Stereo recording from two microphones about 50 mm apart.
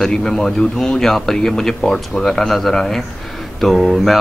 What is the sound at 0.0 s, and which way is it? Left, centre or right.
Speech, centre.